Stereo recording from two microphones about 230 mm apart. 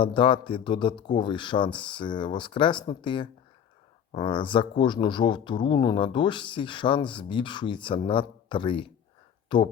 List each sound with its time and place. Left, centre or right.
0.0 s speech: left